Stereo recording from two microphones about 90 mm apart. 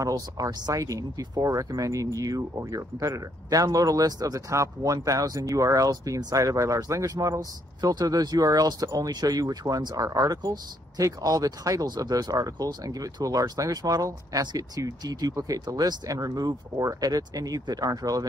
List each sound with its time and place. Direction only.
0.0 s speech: 40° right (ahead or behind)